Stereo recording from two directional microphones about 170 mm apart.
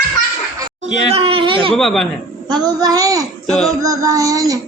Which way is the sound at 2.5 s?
25° right (ahead or behind).